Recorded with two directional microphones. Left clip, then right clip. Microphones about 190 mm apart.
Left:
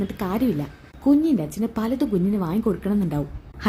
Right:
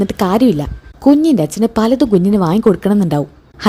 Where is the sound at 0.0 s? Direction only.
40° right (ahead or behind).